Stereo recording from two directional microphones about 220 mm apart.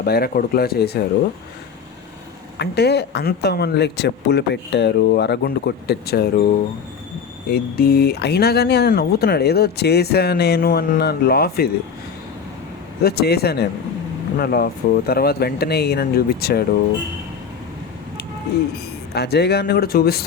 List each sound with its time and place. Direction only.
0.0 s speech: 45° left (ahead or behind)
2.6 s speech: 50° left (ahead or behind)
7.5 s speech: 45° left (ahead or behind)
13.0 s speech: 45° left (ahead or behind)
19.1 s speech: 45° left (ahead or behind)